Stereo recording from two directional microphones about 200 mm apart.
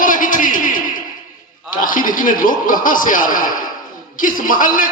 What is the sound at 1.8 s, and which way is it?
A man's voice, 40° left (ahead or behind).